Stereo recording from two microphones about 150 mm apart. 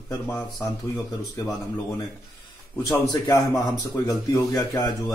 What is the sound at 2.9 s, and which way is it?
Speech, 25° left (ahead or behind).